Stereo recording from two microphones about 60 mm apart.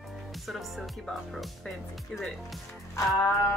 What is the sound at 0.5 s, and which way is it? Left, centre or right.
Speech, centre.